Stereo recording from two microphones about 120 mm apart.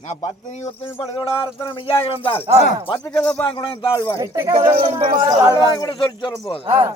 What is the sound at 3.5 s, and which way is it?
Speech, 40° left (ahead or behind).